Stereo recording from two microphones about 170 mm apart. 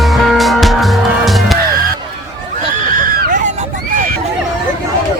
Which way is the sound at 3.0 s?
55° right (ahead or behind).